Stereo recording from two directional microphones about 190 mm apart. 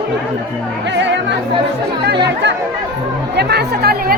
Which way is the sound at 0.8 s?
70° right (ahead or behind).